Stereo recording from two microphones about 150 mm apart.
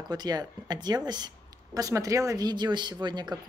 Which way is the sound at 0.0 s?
25° right (ahead or behind).